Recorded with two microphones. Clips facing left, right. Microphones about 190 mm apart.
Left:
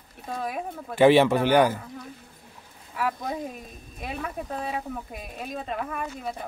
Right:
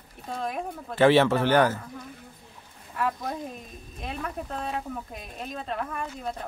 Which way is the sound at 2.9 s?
5° left (ahead or behind).